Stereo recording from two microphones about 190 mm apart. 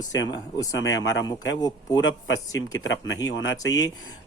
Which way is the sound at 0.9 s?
70° left (ahead or behind).